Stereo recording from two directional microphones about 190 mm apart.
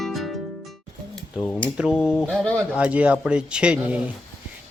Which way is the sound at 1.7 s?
5° right (ahead or behind).